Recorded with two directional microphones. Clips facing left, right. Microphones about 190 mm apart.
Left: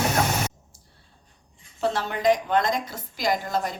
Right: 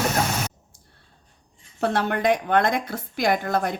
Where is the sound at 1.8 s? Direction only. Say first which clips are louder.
Right 3 dB; 60° right (ahead or behind).